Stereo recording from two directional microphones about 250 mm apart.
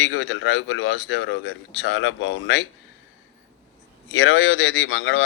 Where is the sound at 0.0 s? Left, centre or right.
Left.